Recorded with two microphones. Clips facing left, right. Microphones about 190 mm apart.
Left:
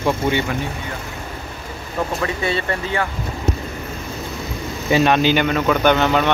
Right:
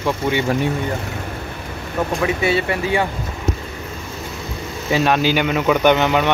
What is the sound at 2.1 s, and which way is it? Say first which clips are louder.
Speech: right 6 dB; 10° right (ahead or behind).